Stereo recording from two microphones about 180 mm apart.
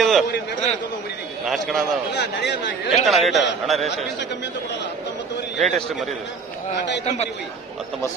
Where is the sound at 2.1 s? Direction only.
70° left (ahead or behind).